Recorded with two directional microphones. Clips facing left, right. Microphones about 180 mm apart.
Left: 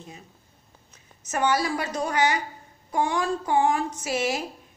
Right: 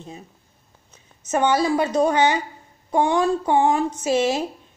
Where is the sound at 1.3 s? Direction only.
25° right (ahead or behind).